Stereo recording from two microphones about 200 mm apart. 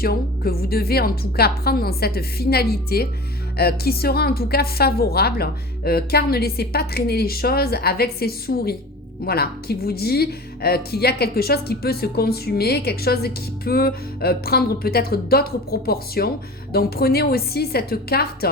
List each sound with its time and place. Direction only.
0.0 s a woman's voice: 50° left (ahead or behind)